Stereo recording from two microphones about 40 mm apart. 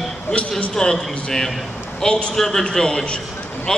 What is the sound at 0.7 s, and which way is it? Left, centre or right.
Speech, centre.